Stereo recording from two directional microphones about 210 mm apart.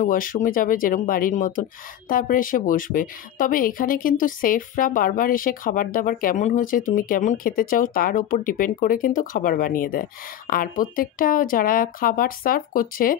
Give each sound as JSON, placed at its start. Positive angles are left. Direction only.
{"t": 0.0, "sound": "speech", "side_deg": 40}